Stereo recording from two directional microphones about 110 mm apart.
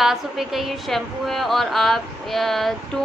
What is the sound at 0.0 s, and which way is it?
A woman's voice, centre (ahead or behind).